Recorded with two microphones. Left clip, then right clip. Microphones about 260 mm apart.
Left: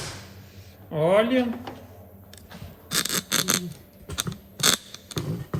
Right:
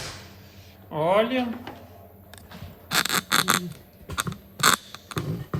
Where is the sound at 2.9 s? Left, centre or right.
Centre.